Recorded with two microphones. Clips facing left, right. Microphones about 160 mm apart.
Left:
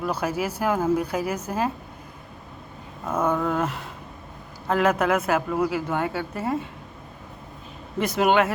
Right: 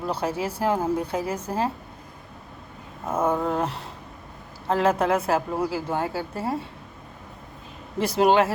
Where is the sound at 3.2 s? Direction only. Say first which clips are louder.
Even; 30° right (ahead or behind).